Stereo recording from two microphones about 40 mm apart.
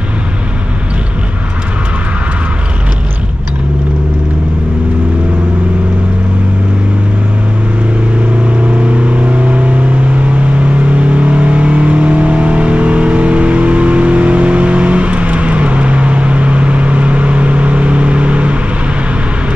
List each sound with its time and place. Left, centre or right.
8.6 s vehicle: right